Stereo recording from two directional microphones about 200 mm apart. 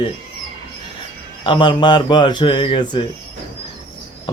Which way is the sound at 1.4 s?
25° left (ahead or behind).